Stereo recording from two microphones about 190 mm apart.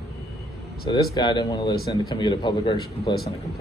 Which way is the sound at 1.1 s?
25° left (ahead or behind).